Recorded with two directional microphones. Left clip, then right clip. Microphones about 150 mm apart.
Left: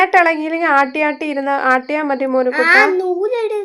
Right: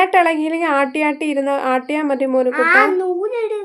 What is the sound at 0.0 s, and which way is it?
Speech, 5° right (ahead or behind).